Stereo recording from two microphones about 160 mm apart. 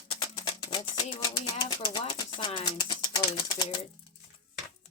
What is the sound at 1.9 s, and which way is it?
Speech, 25° left (ahead or behind).